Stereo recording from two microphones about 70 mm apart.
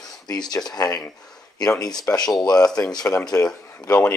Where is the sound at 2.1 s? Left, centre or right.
Left.